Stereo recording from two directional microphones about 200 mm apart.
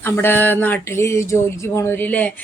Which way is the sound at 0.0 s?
10° left (ahead or behind).